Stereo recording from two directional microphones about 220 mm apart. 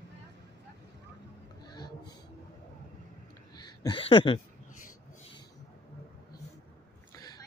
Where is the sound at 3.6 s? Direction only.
20° left (ahead or behind).